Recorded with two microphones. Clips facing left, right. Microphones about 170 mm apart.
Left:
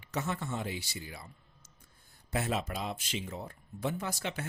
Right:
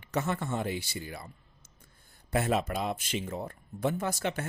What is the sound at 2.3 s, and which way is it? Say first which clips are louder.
Speech: right 5 dB; 55° right (ahead or behind).